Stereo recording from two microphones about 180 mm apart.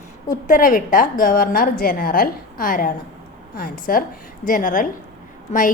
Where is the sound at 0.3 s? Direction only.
50° left (ahead or behind).